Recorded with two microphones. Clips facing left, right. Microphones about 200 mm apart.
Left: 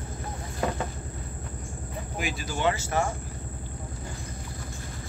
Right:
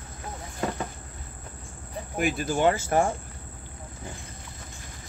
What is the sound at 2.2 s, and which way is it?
Speech, 55° right (ahead or behind).